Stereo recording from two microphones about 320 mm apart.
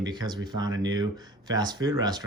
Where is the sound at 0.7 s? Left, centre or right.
Right.